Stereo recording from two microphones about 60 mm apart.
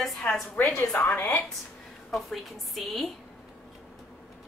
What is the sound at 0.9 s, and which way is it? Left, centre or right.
Speech, left.